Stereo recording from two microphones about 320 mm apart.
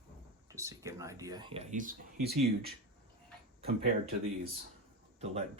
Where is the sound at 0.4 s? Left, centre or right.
Centre; by 2.7 s right.